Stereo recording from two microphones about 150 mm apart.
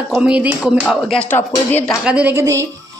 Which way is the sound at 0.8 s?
5° left (ahead or behind).